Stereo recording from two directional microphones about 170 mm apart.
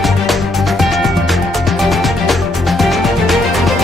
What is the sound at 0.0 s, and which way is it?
Music, centre (ahead or behind).